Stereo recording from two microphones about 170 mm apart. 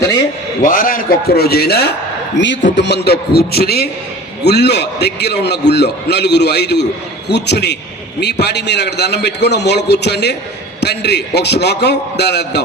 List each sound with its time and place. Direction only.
0.6 s a man's voice: 55° left (ahead or behind); by 12.6 s 80° left